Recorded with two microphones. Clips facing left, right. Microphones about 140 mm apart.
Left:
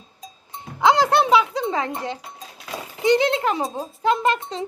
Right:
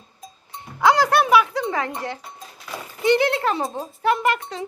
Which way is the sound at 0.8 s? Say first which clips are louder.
Even; 20° left (ahead or behind).